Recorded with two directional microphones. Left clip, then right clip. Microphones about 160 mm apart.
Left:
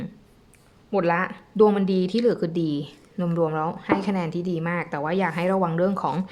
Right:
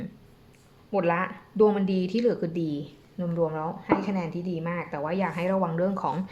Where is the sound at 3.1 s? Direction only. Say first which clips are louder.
Left 4 dB; 50° left (ahead or behind).